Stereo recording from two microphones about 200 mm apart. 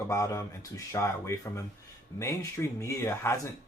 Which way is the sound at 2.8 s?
15° left (ahead or behind).